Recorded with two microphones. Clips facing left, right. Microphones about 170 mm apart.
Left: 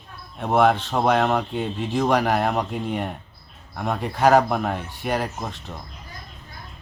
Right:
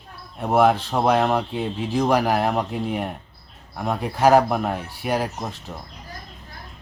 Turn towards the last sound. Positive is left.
turn(degrees=-5)  # may be behind; listen again after turning